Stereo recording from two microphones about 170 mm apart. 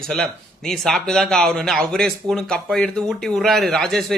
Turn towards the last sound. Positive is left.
turn(degrees=0)  # may be behind; listen again after turning